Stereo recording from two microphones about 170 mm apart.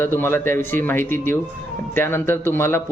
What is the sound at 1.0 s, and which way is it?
Speech, 50° right (ahead or behind).